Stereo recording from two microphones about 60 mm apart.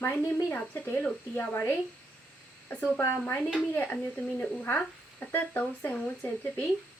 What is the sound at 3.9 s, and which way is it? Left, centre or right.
Speech, left.